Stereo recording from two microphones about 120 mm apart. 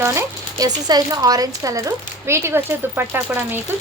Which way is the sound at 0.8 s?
35° right (ahead or behind).